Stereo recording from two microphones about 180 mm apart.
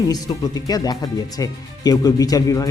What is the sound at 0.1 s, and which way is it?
Speech, 20° left (ahead or behind).